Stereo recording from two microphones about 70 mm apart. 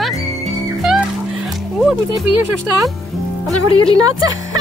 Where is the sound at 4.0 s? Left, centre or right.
Right.